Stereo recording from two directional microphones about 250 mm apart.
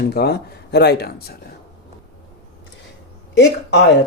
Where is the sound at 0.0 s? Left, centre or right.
Left.